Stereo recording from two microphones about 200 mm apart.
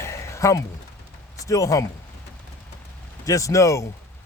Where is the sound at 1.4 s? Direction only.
15° left (ahead or behind).